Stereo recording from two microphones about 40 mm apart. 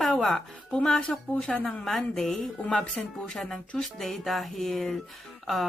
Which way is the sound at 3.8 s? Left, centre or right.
Centre.